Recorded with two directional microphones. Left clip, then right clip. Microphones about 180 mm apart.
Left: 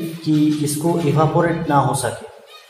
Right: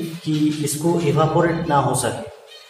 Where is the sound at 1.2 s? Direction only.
20° left (ahead or behind).